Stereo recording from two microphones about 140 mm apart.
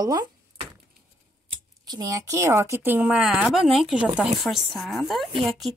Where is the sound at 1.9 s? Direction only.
25° right (ahead or behind).